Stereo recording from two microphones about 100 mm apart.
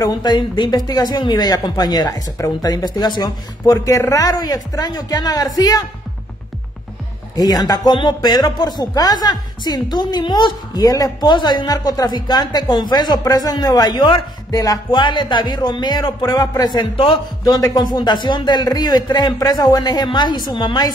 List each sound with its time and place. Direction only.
0.0 s speech: 45° left (ahead or behind)
7.3 s speech: 40° left (ahead or behind)
16.9 s a man's voice: 60° left (ahead or behind)
17.5 s speech: 40° left (ahead or behind)